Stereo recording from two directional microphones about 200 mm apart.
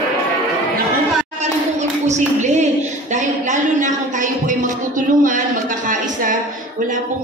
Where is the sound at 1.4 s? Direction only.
35° right (ahead or behind).